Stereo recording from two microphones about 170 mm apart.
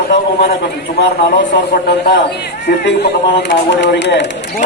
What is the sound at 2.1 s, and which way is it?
Speech, 75° left (ahead or behind).